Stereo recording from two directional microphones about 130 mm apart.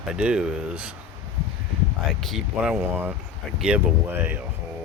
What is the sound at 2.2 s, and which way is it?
Speech, centre (ahead or behind).